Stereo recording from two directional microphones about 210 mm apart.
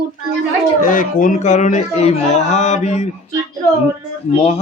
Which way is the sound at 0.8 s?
40° left (ahead or behind).